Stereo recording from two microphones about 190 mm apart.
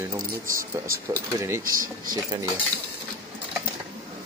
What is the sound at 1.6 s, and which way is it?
Speech, 45° right (ahead or behind).